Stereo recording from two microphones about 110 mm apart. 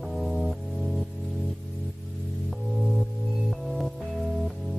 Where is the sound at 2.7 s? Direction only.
Centre (ahead or behind).